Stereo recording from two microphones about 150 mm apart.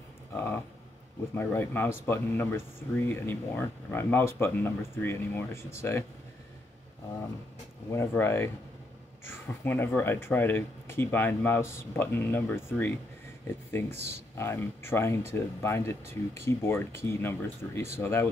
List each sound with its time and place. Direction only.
0.3 s speech: 15° left (ahead or behind)
7.9 s speech: 15° left (ahead or behind)
14.3 s speech: 15° left (ahead or behind)